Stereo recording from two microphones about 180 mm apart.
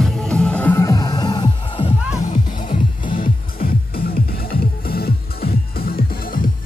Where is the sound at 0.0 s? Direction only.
5° left (ahead or behind); by 3.1 s 35° left (ahead or behind).